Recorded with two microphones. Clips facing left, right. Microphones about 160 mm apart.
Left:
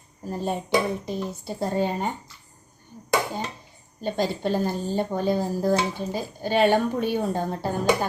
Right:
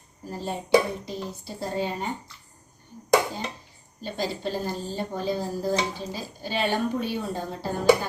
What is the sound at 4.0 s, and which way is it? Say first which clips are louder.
Speech: left 5 dB; 55° left (ahead or behind).